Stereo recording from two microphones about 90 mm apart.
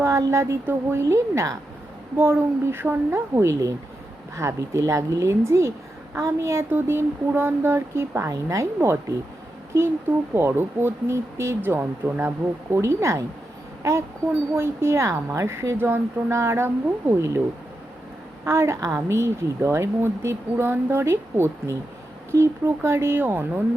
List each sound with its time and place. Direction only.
0.0 s a woman's voice: 35° right (ahead or behind)
2.1 s a woman's voice: 25° right (ahead or behind)
10.3 s a woman's voice: 25° right (ahead or behind)
12.7 s a woman's voice: 30° right (ahead or behind)
14.5 s a woman's voice: 30° right (ahead or behind)
18.4 s a woman's voice: 30° right (ahead or behind)